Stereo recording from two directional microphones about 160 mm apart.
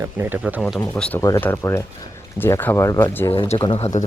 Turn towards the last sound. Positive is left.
turn(degrees=45)  # may be behind; listen again after turning